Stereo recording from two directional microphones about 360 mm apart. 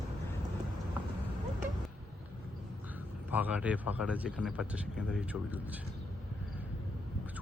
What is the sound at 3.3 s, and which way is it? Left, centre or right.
Speech, centre.